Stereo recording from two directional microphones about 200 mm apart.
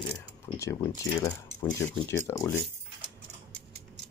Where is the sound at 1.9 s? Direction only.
10° left (ahead or behind).